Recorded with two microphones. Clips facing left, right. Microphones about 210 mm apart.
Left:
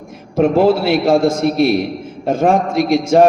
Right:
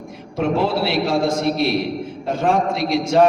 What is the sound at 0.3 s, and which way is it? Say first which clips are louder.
A man's voice: left 7 dB; 50° left (ahead or behind).